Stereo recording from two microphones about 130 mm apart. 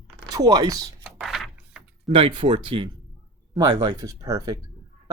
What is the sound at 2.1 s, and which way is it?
Speech, 45° right (ahead or behind).